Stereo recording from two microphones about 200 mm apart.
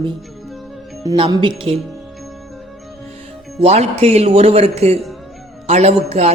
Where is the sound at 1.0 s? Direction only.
20° right (ahead or behind).